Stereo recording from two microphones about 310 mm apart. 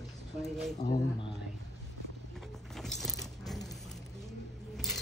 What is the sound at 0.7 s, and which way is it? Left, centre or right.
Speech, left.